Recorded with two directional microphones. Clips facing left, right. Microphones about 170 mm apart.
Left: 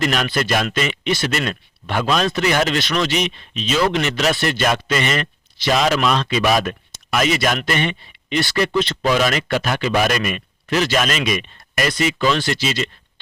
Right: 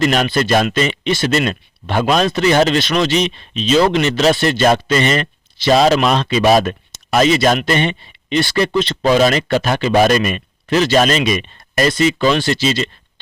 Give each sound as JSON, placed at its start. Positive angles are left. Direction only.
{"t": 0.0, "sound": "speech", "side_deg": -30}